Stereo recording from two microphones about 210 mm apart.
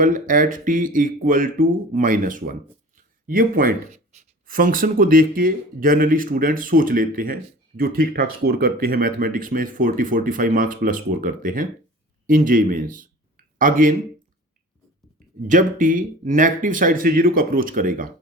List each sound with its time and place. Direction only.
0.0 s speech: 40° right (ahead or behind)
15.4 s speech: 40° right (ahead or behind)